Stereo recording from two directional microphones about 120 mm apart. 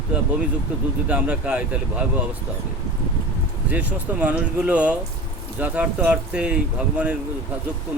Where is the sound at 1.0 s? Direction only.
10° right (ahead or behind).